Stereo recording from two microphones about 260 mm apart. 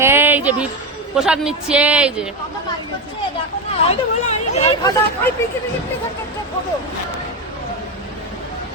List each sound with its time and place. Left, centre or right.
0.0 s music: centre
1.1 s speech: centre
3.8 s speech: left